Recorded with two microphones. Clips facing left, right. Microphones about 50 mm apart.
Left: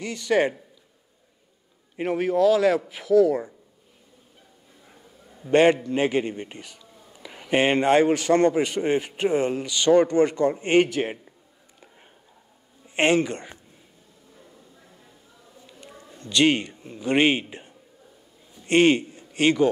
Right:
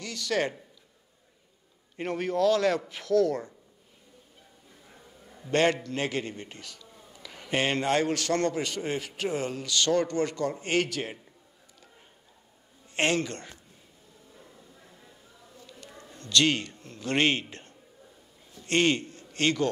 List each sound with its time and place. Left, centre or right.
0.0 s speech: left
2.0 s a man's voice: centre
5.4 s a man's voice: centre
12.8 s a man's voice: centre
15.5 s a sound: centre